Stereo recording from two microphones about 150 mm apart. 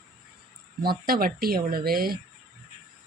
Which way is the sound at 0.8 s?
90° right.